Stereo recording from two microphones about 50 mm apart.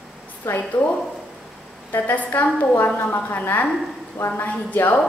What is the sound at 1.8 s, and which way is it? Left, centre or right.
A woman's voice, left.